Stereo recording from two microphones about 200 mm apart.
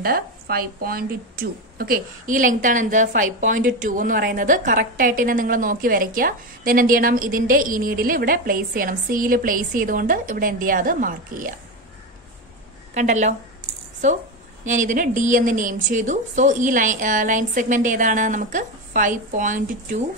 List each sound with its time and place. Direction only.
0.0 s speech: 50° right (ahead or behind)
12.9 s a woman's voice: 35° right (ahead or behind)